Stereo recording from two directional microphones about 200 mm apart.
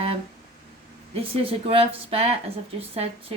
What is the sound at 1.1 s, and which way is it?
Speech, 30° right (ahead or behind).